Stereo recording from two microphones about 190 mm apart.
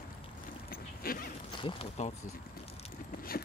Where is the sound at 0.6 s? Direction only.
50° left (ahead or behind).